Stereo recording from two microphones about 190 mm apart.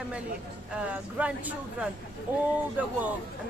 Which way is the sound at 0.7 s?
5° right (ahead or behind).